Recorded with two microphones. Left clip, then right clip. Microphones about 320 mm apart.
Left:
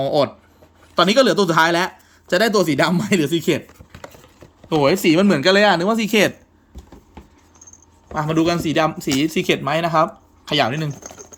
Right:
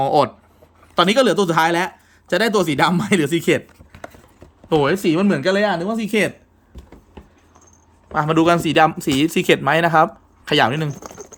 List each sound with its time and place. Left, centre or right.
0.0 s speech: centre
4.7 s speech: centre
8.1 s speech: centre